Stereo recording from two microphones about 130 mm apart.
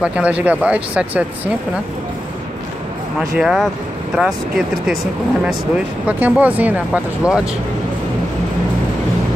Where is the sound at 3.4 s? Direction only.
5° right (ahead or behind).